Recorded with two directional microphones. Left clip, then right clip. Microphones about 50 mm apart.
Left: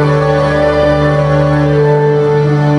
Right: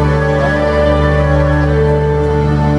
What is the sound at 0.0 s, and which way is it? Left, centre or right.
Music, centre.